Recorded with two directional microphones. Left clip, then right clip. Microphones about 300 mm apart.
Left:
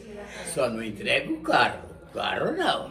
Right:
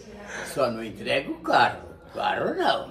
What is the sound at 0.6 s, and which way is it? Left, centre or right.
Speech, centre.